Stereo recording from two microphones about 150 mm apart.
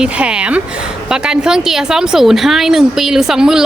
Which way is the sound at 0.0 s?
10° right (ahead or behind).